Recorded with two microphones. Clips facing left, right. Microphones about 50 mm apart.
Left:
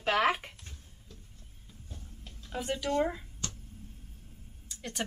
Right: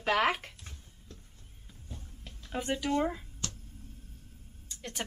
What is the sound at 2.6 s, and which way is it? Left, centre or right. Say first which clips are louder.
Speech: even; centre.